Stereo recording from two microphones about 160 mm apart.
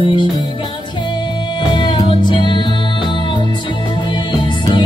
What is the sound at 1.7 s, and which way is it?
Music, 30° left (ahead or behind).